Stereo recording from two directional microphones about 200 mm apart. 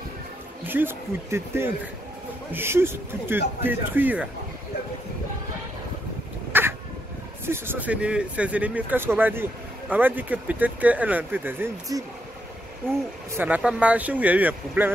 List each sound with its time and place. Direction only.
0.7 s speech: 10° right (ahead or behind)
6.5 s a sound: 10° right (ahead or behind)
7.4 s speech: 10° right (ahead or behind)